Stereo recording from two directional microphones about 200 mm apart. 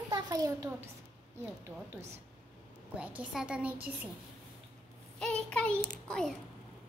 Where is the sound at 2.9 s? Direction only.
5° right (ahead or behind).